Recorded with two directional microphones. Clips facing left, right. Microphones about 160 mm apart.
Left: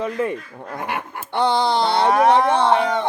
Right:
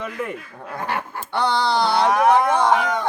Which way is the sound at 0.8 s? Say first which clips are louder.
Right 1 dB; 20° left (ahead or behind).